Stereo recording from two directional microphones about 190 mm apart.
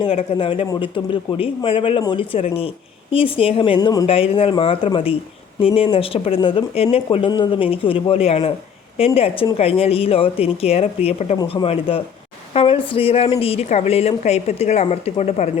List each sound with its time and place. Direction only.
0.0 s speech: 30° left (ahead or behind)